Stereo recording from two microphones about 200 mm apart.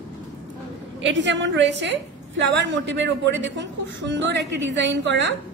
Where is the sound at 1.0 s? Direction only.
65° right (ahead or behind).